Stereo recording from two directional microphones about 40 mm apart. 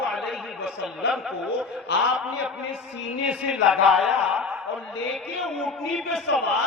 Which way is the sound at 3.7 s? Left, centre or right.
Centre.